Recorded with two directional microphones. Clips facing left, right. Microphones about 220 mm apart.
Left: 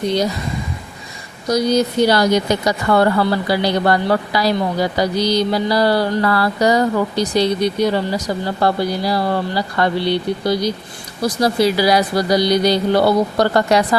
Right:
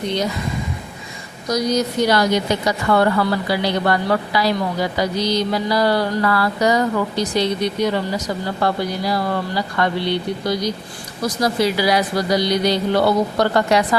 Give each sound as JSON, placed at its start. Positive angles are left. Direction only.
{"t": 1.5, "sound": "a woman's voice", "side_deg": 30}